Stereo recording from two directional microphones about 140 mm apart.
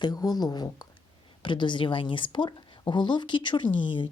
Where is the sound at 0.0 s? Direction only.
25° left (ahead or behind).